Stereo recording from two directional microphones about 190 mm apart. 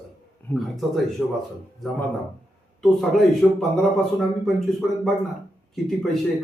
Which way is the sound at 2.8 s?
Centre (ahead or behind).